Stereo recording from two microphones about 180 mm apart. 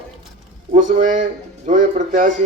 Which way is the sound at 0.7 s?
45° right (ahead or behind).